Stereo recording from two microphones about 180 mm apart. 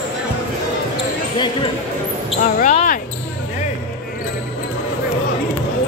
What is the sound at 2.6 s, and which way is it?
Speech, 45° left (ahead or behind).